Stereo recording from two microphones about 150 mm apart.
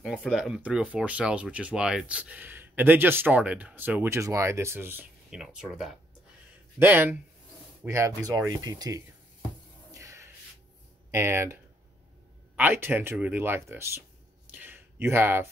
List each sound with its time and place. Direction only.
0.1 s speech: 5° left (ahead or behind)
0.4 s speech: 5° right (ahead or behind)
6.8 s speech: 15° right (ahead or behind)
9.9 s a sound: 20° right (ahead or behind)
11.1 s speech: 15° right (ahead or behind)
12.5 s speech: 10° right (ahead or behind)
14.5 s a sound: 15° right (ahead or behind)